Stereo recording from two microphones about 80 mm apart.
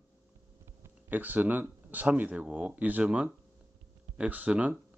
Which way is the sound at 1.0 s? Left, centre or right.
Right.